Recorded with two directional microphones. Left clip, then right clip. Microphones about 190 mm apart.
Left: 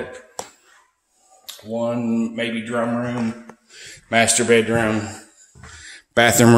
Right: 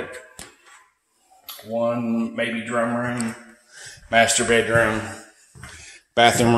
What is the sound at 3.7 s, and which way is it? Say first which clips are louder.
A man's voice: right 1 dB; 60° left (ahead or behind).